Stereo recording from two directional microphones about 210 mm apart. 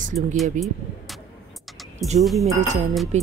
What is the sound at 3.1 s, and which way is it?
Speech, 35° right (ahead or behind).